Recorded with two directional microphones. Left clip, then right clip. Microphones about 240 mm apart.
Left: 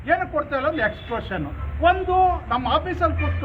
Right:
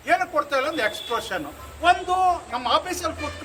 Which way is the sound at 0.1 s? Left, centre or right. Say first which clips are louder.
Even; centre.